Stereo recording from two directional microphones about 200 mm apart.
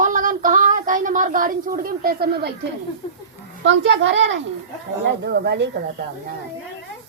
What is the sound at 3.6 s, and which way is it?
A child's voice, 65° right (ahead or behind).